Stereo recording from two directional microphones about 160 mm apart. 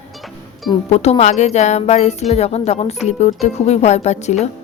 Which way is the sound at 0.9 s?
40° left (ahead or behind).